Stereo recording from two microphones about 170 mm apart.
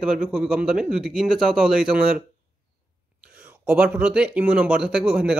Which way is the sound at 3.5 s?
10° right (ahead or behind).